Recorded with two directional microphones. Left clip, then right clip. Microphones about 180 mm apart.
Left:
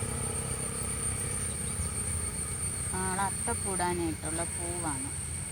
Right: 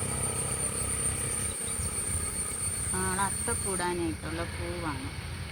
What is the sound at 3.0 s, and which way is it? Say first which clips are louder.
Vehicle: right 1 dB; 45° left (ahead or behind).